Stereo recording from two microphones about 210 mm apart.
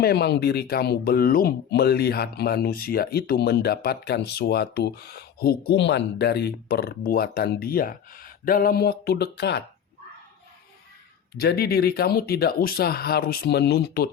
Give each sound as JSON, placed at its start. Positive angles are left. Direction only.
{"t": 0.0, "sound": "speech", "side_deg": 50}
{"t": 11.3, "sound": "speech", "side_deg": 45}